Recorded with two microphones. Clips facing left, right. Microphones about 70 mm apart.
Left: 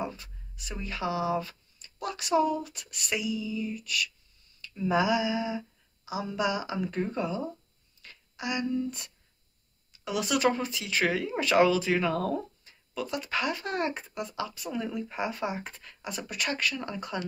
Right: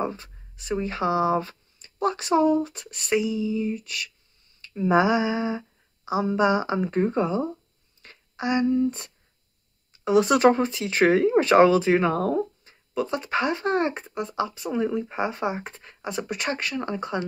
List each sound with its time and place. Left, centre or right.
0.0 s speech: right